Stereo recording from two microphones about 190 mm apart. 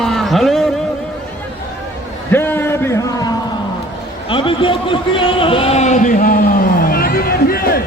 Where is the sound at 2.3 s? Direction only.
10° left (ahead or behind).